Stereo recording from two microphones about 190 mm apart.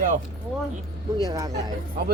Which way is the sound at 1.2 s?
20° right (ahead or behind).